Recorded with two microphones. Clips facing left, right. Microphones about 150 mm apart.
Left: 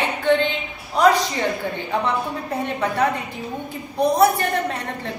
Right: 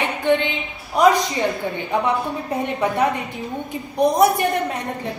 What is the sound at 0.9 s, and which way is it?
A woman's voice, 20° right (ahead or behind).